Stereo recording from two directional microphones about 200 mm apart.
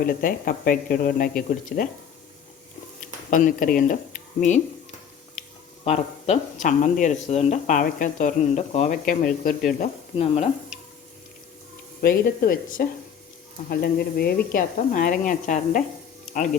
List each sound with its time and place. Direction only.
0.0 s speech: 45° left (ahead or behind)
3.0 s speech: 40° left (ahead or behind)
5.8 s speech: 35° left (ahead or behind)
12.0 s speech: 45° left (ahead or behind)